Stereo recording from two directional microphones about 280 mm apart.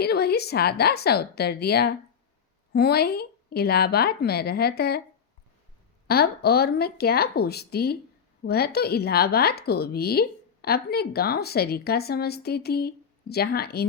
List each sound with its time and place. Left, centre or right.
0.0 s speech: left
6.1 s speech: left